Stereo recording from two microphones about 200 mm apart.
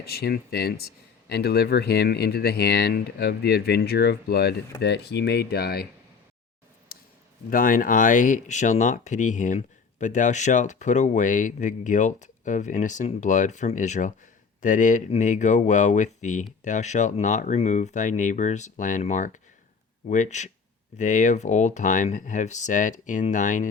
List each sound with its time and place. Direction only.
0.0 s speech: 50° left (ahead or behind)
6.9 s a sound: 50° left (ahead or behind)
7.5 s speech: 45° left (ahead or behind)